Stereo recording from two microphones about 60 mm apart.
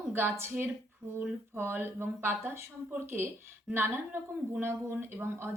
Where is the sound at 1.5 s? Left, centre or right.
Right.